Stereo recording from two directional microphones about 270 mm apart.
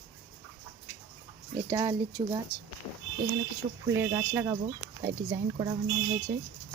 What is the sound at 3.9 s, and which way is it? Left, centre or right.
Speech, centre.